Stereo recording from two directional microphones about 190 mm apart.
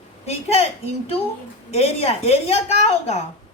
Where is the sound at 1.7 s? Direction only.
35° left (ahead or behind).